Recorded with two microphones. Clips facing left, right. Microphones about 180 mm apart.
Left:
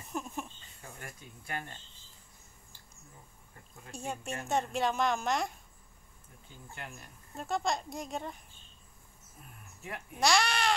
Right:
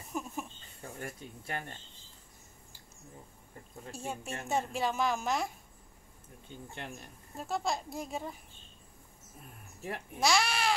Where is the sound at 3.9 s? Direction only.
5° right (ahead or behind).